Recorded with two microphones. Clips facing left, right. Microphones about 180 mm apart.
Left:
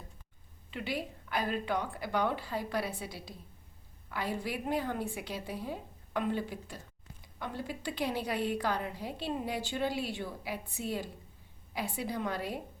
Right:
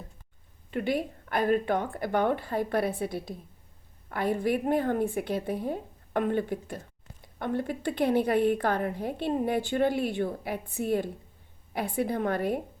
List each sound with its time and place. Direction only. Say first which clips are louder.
0.7 s a woman's voice: right 8 dB; 50° right (ahead or behind)